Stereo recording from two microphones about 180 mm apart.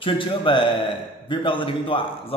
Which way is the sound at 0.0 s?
25° left (ahead or behind).